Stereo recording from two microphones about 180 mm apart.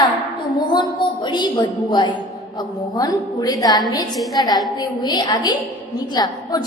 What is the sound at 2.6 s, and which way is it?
A woman's voice, 20° left (ahead or behind).